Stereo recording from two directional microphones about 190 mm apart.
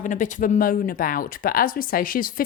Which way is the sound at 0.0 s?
40° left (ahead or behind).